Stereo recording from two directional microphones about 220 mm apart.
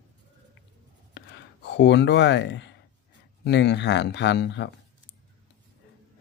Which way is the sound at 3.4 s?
50° left (ahead or behind).